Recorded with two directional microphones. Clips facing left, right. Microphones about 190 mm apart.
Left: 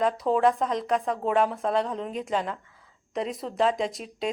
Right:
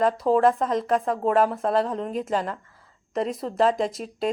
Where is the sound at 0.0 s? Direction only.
Centre (ahead or behind).